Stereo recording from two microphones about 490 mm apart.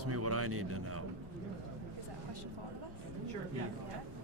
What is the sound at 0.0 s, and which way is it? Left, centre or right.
Speech, right.